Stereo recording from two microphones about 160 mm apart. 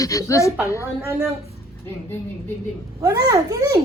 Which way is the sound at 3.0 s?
20° right (ahead or behind).